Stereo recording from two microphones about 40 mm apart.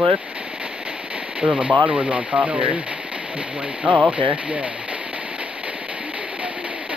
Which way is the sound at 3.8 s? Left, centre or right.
Right.